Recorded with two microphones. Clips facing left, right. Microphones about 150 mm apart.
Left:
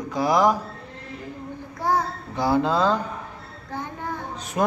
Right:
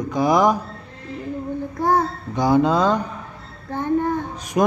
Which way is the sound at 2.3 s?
20° right (ahead or behind).